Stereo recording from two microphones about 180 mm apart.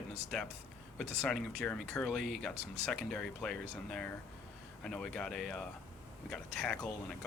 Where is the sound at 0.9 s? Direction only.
5° left (ahead or behind).